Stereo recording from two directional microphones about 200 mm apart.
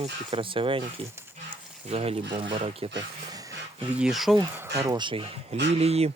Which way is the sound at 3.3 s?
15° right (ahead or behind).